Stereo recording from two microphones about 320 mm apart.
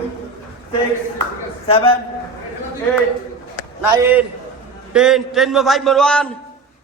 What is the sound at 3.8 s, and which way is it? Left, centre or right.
A man's voice, centre.